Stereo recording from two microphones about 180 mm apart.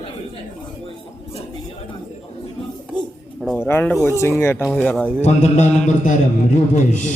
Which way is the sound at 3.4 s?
5° left (ahead or behind).